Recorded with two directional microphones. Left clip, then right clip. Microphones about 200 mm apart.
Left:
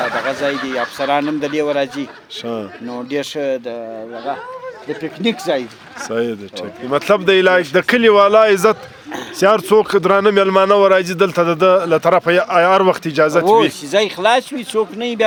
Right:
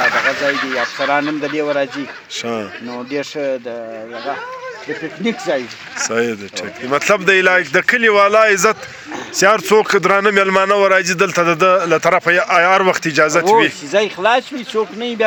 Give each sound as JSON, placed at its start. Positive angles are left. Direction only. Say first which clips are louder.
{"t": 0.0, "sound": "a sound", "louder": "right 5 dB", "side_deg": 50}
{"t": 0.3, "sound": "speech", "louder": "right 3 dB", "side_deg": 25}
{"t": 2.4, "sound": "a man's voice", "louder": "right 2 dB", "side_deg": 0}
{"t": 2.9, "sound": "speech", "louder": "left 2 dB", "side_deg": 25}
{"t": 5.2, "sound": "speech", "louder": "left 1 dB", "side_deg": 25}
{"t": 6.1, "sound": "a man's voice", "louder": "right 1 dB", "side_deg": 0}
{"t": 13.9, "sound": "speech", "louder": "left 1 dB", "side_deg": 20}